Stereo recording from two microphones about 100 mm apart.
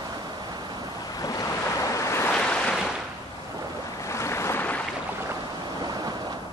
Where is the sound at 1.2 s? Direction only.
35° left (ahead or behind).